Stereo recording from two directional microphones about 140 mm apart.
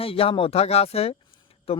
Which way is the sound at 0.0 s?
40° left (ahead or behind).